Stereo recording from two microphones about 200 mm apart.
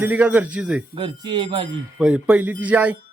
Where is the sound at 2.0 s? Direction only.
5° right (ahead or behind).